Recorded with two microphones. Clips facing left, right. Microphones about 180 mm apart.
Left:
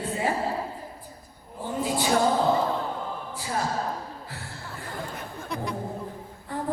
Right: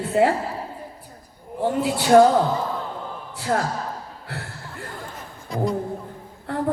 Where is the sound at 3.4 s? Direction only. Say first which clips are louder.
Right 5 dB; 70° right (ahead or behind).